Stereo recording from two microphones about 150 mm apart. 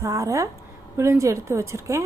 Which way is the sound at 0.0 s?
20° right (ahead or behind).